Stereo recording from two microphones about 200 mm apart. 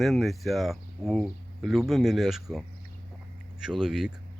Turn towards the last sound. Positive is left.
turn(degrees=-5)  # may be behind; listen again after turning